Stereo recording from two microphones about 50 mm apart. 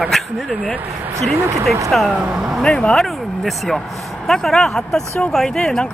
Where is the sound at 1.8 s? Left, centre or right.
Centre.